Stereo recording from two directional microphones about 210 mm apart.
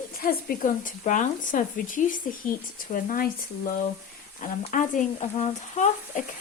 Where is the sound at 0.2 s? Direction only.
45° left (ahead or behind).